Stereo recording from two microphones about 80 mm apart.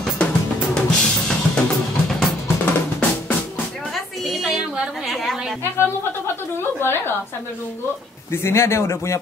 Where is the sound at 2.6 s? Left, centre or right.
Centre.